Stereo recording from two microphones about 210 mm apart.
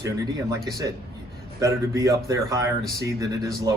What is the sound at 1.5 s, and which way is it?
Speech, 15° right (ahead or behind).